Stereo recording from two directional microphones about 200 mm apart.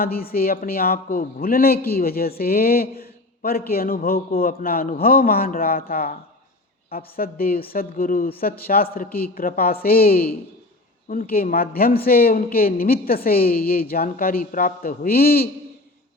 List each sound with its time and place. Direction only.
0.0 s a man's voice: 50° left (ahead or behind)